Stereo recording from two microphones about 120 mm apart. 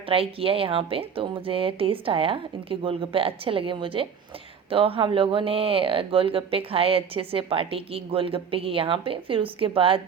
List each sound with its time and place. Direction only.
0.1 s speech: 50° right (ahead or behind)